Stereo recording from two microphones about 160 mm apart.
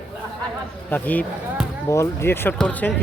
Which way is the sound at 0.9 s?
10° left (ahead or behind).